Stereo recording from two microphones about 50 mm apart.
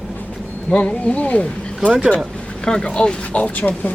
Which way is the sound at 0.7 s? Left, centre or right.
Left.